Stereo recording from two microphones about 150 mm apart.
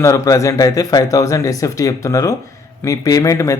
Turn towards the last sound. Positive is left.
turn(degrees=20)  # may be behind; listen again after turning